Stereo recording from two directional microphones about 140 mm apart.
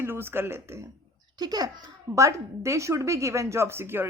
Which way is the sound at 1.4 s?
30° right (ahead or behind).